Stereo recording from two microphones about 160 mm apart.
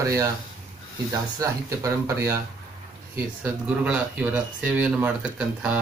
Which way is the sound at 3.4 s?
10° right (ahead or behind).